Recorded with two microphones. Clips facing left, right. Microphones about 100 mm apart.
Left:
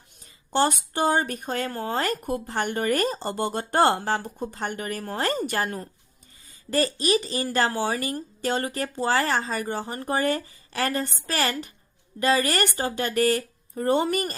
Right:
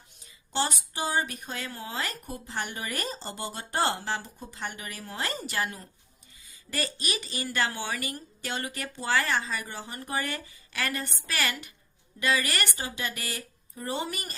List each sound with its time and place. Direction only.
0.3 s speech: 50° left (ahead or behind)